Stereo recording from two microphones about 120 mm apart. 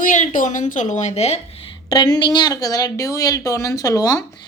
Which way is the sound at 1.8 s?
35° left (ahead or behind).